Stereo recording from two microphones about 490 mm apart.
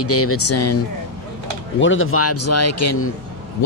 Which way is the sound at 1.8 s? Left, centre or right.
Left.